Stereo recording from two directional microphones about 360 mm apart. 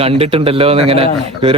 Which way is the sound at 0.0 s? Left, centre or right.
Centre.